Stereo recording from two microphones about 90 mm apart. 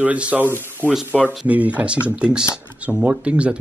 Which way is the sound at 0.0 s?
15° right (ahead or behind).